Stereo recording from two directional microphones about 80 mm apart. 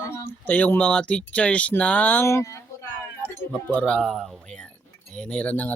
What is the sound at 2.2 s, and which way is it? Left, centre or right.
Speech, left.